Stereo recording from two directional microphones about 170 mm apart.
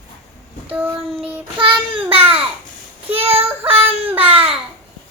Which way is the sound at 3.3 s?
35° right (ahead or behind).